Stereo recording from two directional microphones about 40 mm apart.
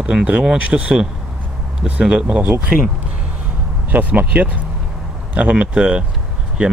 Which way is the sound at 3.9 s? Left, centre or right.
Right.